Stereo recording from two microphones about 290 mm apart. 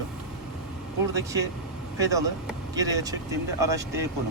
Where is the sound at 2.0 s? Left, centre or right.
Centre.